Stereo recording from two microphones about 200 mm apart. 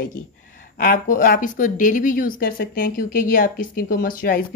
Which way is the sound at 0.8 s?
45° left (ahead or behind).